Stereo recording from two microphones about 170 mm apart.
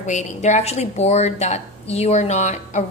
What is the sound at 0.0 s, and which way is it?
A woman's voice, 45° left (ahead or behind).